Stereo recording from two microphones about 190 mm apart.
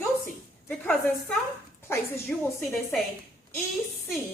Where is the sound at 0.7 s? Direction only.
5° left (ahead or behind).